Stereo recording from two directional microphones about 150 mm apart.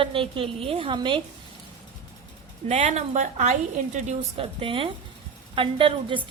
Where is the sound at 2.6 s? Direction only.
50° right (ahead or behind).